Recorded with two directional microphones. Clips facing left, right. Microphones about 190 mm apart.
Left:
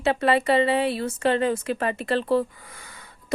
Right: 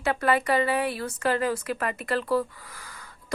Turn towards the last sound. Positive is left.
turn(degrees=25)  # may be behind; listen again after turning